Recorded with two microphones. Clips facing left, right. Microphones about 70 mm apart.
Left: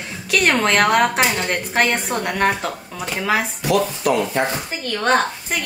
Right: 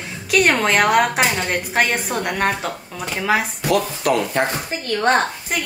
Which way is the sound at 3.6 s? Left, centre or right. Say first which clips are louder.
Left 1 dB; right.